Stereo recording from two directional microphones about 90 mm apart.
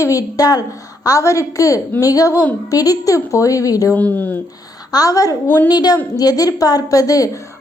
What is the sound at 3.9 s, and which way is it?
Speech, 20° left (ahead or behind).